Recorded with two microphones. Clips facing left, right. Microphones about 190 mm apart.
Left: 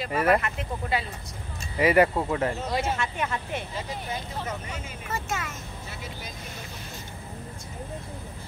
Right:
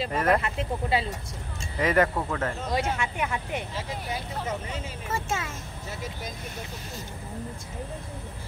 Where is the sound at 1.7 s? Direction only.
10° left (ahead or behind).